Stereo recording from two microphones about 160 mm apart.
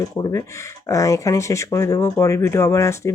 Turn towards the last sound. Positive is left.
turn(degrees=20)  # may be behind; listen again after turning